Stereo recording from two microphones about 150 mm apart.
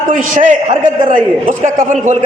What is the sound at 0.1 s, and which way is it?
A man's voice, 60° right (ahead or behind).